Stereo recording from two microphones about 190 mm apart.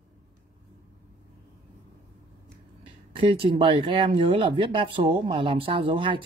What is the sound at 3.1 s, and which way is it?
Speech, 25° right (ahead or behind).